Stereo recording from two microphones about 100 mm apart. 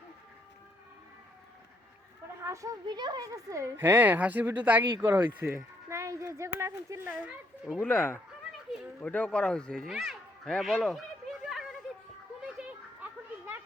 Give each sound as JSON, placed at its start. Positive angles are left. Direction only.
{"t": 2.4, "sound": "children playing", "side_deg": -30}
{"t": 2.8, "sound": "speech", "side_deg": -45}
{"t": 3.2, "sound": "speech", "side_deg": -30}
{"t": 4.9, "sound": "speech", "side_deg": -30}
{"t": 5.2, "sound": "speech", "side_deg": -20}
{"t": 5.5, "sound": "speech", "side_deg": -30}
{"t": 7.1, "sound": "speech", "side_deg": -15}
{"t": 7.8, "sound": "speech", "side_deg": 15}
{"t": 10.8, "sound": "a sound", "side_deg": 0}
{"t": 12.5, "sound": "children playing", "side_deg": -10}